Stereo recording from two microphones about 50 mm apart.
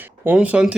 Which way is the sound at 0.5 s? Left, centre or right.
Right.